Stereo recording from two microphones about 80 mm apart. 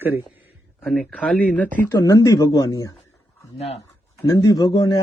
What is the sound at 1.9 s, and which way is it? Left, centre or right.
A man's voice, left.